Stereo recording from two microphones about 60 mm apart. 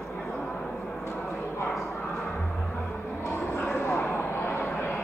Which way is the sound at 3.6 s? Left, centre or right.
Left.